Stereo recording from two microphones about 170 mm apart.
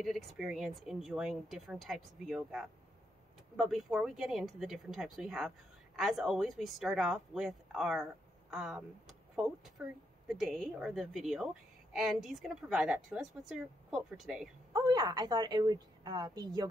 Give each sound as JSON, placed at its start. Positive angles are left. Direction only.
{"t": 0.0, "sound": "speech", "side_deg": 0}
{"t": 14.7, "sound": "a woman's voice", "side_deg": -25}